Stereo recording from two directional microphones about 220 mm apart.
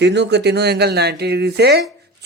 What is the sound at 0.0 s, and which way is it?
Speech, 50° right (ahead or behind).